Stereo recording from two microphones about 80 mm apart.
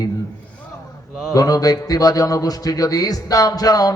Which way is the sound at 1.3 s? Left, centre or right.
Left.